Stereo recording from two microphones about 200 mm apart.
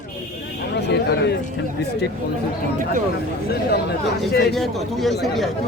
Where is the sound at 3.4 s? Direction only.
50° left (ahead or behind).